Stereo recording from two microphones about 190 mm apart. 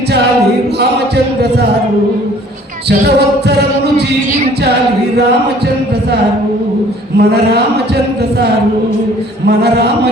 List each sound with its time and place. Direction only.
0.8 s music: 60° right (ahead or behind)
3.2 s music: 60° right (ahead or behind)
7.2 s music: 60° right (ahead or behind)
9.5 s music: 60° right (ahead or behind)